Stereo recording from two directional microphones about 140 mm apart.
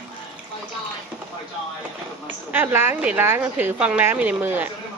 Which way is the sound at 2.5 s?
15° right (ahead or behind).